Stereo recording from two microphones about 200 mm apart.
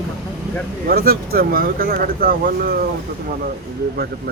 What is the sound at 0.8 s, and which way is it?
Speech, 50° right (ahead or behind).